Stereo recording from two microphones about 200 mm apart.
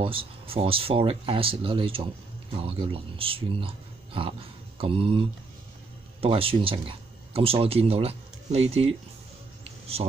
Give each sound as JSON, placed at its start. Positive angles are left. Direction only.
{"t": 0.0, "sound": "speech", "side_deg": -25}
{"t": 6.2, "sound": "speech", "side_deg": -30}